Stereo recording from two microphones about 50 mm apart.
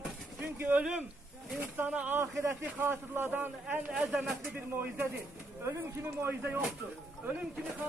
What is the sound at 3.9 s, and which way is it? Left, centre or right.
Speech, centre.